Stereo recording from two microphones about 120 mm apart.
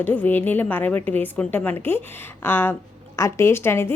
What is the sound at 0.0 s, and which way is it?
A woman's voice, 15° left (ahead or behind).